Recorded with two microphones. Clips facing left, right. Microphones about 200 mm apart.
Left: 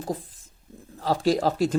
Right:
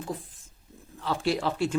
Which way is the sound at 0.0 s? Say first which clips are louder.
Left 4 dB; 40° left (ahead or behind).